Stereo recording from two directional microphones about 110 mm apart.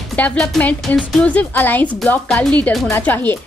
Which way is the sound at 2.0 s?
5° left (ahead or behind).